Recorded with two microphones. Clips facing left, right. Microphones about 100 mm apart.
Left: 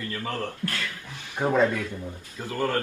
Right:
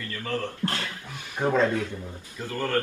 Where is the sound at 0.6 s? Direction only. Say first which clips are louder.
Right 4 dB; 30° right (ahead or behind).